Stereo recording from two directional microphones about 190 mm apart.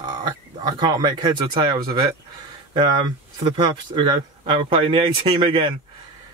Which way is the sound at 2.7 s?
20° right (ahead or behind).